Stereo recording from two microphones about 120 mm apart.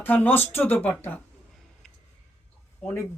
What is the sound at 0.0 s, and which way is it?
Speech, 15° left (ahead or behind).